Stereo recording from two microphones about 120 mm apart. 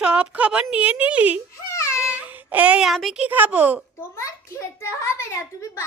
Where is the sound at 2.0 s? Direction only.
10° right (ahead or behind).